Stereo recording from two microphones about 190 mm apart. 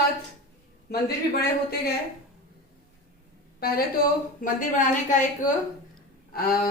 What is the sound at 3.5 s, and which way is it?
A woman's voice, 55° left (ahead or behind).